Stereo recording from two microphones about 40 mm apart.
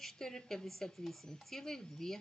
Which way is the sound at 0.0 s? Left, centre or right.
Centre.